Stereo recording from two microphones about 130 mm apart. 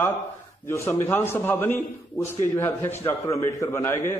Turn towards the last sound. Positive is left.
turn(degrees=20)  # may be behind; listen again after turning